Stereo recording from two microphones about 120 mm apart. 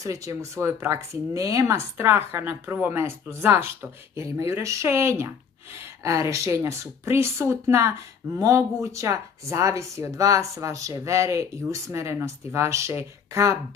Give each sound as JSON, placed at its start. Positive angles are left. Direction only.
{"t": 0.0, "sound": "speech", "side_deg": -25}